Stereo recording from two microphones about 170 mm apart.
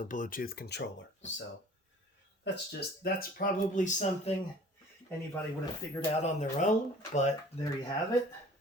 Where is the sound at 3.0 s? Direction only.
55° left (ahead or behind).